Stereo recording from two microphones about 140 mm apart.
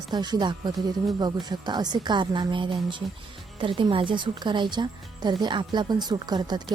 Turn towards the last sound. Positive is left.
turn(degrees=-30)  # may be behind; listen again after turning